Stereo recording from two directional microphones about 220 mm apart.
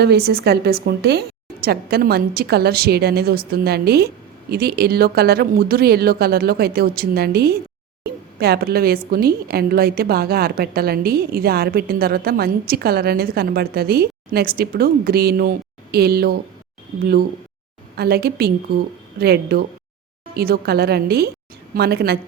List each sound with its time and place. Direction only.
0.0 s a woman's voice: 45° right (ahead or behind)
17.9 s a woman's voice: 45° right (ahead or behind)